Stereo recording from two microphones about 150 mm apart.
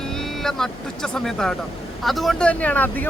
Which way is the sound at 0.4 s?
5° left (ahead or behind).